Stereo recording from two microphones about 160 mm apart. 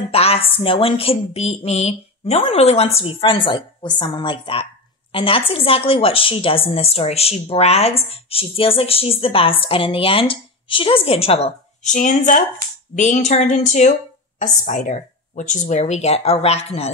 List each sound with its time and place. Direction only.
0.1 s speech: 40° left (ahead or behind)